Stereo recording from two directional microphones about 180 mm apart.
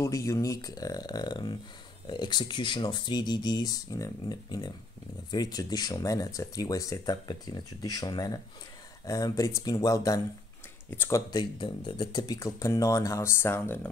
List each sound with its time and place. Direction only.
0.0 s speech: 20° left (ahead or behind)